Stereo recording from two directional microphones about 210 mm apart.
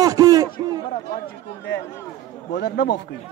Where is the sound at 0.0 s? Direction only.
15° right (ahead or behind).